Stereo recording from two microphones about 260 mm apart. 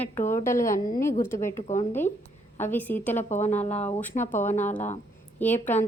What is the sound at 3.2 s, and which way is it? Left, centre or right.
Speech, left.